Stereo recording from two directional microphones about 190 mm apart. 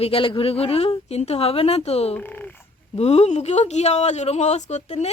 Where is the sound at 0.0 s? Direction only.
30° left (ahead or behind).